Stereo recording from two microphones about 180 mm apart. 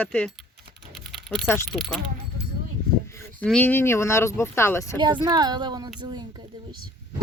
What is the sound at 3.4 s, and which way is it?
Speech, 10° left (ahead or behind).